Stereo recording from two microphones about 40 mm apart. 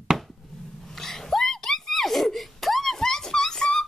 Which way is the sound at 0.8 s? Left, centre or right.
Centre.